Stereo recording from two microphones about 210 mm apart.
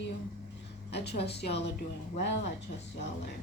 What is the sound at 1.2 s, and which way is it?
Speech, 50° left (ahead or behind).